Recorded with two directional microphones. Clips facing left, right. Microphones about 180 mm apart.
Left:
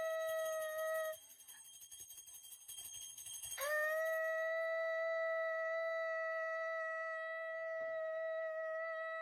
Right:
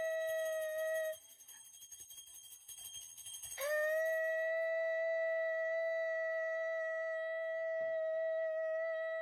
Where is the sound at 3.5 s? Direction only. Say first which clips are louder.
Right 4 dB; 20° right (ahead or behind).